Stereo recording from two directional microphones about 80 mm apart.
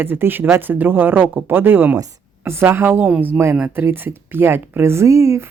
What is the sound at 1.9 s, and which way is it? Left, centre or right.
A woman's voice, right.